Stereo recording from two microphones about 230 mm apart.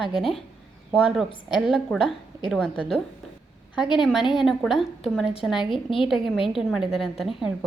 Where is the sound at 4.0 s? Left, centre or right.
Centre.